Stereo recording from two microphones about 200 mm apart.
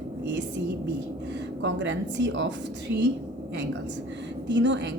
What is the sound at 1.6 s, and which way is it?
Speech, 65° right (ahead or behind).